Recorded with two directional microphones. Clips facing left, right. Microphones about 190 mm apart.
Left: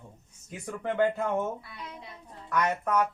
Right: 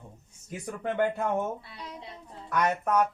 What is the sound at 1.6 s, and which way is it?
Speech, 30° right (ahead or behind).